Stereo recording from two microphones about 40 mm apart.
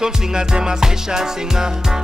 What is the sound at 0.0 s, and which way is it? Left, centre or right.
Music, centre.